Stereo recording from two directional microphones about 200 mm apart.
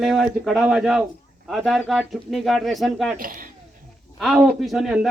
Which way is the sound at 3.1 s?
45° right (ahead or behind).